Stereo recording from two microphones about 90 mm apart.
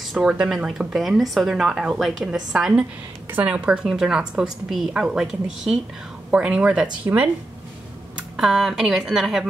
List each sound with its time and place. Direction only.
0.0 s a woman's voice: 5° right (ahead or behind)
8.4 s speech: 5° right (ahead or behind)